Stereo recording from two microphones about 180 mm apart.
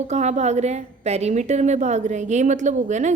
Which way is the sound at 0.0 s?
40° right (ahead or behind).